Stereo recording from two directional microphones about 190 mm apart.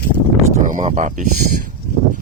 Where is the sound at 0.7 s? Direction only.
40° right (ahead or behind).